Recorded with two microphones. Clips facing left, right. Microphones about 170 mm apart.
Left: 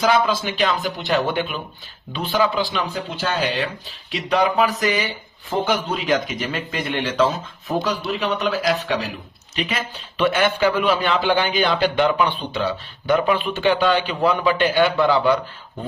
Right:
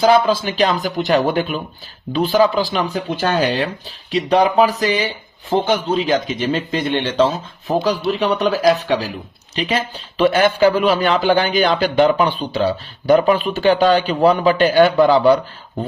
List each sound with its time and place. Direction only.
0.0 s a man's voice: 35° right (ahead or behind)